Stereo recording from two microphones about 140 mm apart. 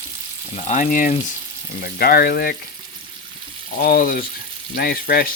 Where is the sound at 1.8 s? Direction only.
90° left.